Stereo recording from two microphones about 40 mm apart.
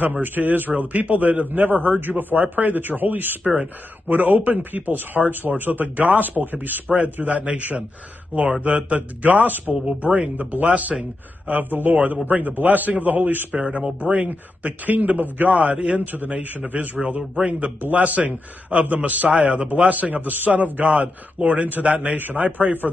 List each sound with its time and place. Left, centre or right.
0.0 s a man's voice: right
14.1 s a man's voice: right
17.5 s a man's voice: right
19.3 s a man's voice: right
19.9 s a man's voice: right